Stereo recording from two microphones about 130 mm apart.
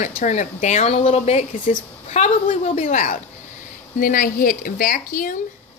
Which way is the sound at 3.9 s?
90° left.